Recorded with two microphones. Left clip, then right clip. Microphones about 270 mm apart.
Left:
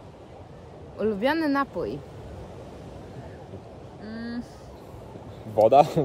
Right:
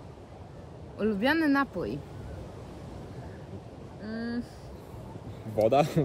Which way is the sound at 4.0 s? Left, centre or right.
Centre.